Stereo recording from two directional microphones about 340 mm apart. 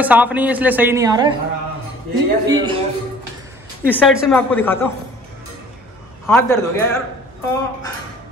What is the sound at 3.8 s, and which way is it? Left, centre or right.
Speech, centre.